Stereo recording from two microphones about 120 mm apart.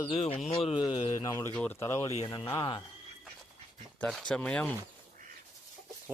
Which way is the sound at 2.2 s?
45° left (ahead or behind).